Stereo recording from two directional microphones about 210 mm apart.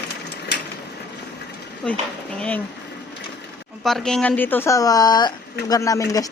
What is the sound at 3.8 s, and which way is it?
Speech, centre (ahead or behind).